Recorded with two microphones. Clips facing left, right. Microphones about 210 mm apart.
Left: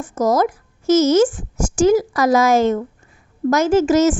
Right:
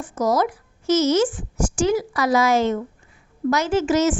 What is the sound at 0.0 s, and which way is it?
A woman's voice, 45° left (ahead or behind).